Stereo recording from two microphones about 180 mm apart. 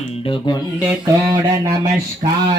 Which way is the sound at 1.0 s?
20° right (ahead or behind).